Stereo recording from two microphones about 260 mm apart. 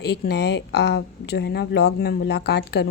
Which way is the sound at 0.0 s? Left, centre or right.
Left.